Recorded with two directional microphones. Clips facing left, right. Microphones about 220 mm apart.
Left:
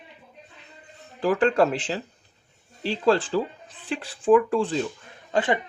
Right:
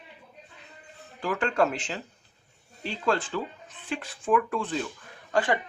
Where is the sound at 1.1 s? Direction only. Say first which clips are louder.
Left 6 dB; 35° left (ahead or behind).